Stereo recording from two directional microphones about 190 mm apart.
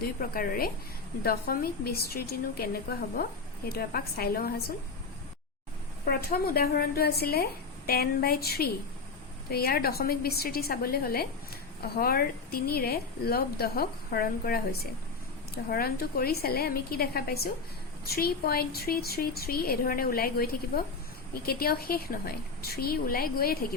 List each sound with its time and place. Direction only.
0.0 s speech: 50° left (ahead or behind)
3.7 s speech: 50° left (ahead or behind)
6.1 s speech: 55° left (ahead or behind)